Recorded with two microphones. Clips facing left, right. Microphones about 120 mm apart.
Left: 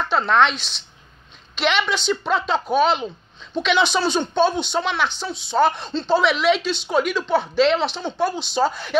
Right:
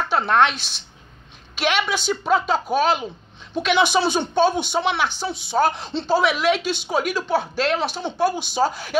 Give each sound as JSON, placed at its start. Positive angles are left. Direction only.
{"t": 0.1, "sound": "a woman's voice", "side_deg": -5}